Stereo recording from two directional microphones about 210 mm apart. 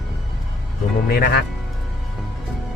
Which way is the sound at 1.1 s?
50° left (ahead or behind).